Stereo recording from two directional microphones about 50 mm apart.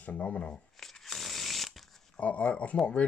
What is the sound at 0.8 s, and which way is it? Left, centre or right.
Chainsaw, centre.